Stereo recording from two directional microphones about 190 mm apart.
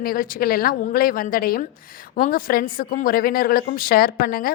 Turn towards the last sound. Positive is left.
turn(degrees=50)  # may be behind; listen again after turning